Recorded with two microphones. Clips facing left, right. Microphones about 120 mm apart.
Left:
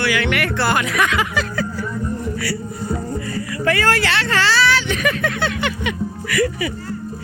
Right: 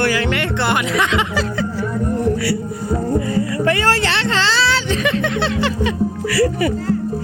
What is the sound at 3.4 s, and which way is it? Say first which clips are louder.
Speech: right 3 dB; 25° right (ahead or behind).